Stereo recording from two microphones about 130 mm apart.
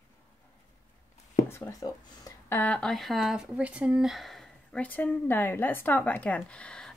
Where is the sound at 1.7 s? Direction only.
30° left (ahead or behind).